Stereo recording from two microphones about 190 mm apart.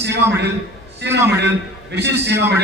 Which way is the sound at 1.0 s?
65° right (ahead or behind).